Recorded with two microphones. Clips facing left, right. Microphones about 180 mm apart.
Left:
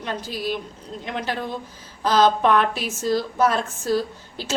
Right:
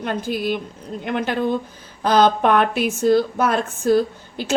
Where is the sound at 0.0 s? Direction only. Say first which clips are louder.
Right 5 dB; 55° right (ahead or behind).